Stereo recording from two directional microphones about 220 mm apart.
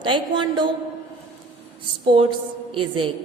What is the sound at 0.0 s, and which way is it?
Speech, 20° right (ahead or behind).